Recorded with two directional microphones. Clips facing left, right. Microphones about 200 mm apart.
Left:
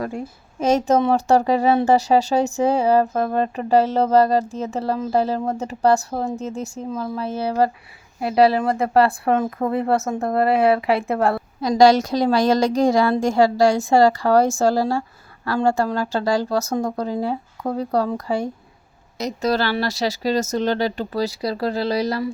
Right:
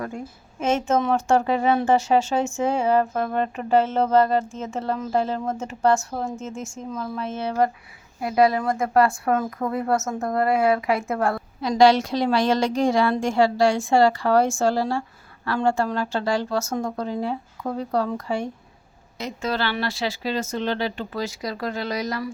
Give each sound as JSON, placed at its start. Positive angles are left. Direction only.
{"t": 0.6, "sound": "a woman's voice", "side_deg": 40}